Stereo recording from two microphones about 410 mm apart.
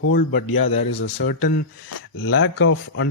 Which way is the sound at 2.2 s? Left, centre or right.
Left.